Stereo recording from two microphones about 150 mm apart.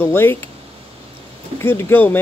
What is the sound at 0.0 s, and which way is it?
Speech, 15° left (ahead or behind).